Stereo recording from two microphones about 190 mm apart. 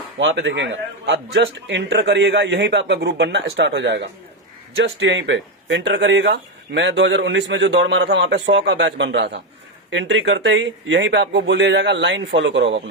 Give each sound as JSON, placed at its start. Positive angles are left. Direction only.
{"t": 0.2, "sound": "a man's voice", "side_deg": -75}